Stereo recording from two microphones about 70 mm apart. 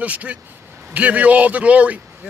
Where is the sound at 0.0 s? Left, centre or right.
Centre.